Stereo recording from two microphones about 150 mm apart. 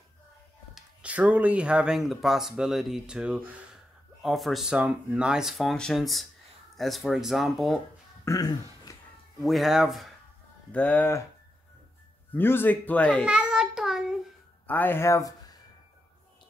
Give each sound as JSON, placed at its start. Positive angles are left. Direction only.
{"t": 0.7, "sound": "speech", "side_deg": -10}
{"t": 8.3, "sound": "speech", "side_deg": 25}
{"t": 9.4, "sound": "speech", "side_deg": 0}
{"t": 10.7, "sound": "speech", "side_deg": 10}
{"t": 12.4, "sound": "speech", "side_deg": 15}
{"t": 13.2, "sound": "child singing", "side_deg": -5}
{"t": 14.7, "sound": "speech", "side_deg": 15}